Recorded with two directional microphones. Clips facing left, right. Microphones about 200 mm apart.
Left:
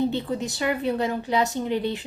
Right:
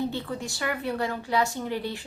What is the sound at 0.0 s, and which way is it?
A woman's voice, 20° left (ahead or behind).